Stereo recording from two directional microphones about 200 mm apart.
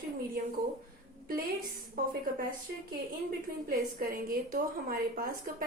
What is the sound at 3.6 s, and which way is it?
A woman's voice, 45° right (ahead or behind).